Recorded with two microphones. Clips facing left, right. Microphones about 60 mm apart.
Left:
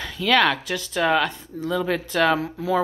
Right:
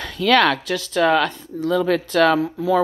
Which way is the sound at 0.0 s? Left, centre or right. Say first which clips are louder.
Right 3 dB; centre.